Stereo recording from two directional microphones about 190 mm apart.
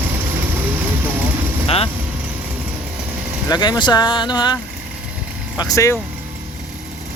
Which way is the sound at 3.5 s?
20° left (ahead or behind).